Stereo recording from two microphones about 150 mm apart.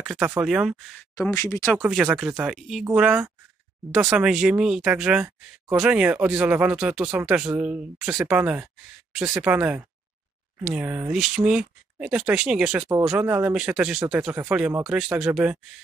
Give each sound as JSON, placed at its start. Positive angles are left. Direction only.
{"t": 0.0, "sound": "speech", "side_deg": -10}
{"t": 1.1, "sound": "speech", "side_deg": 20}
{"t": 2.0, "sound": "speech", "side_deg": -5}